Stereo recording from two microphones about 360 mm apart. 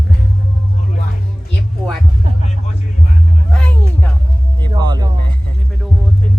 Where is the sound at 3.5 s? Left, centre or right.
Centre.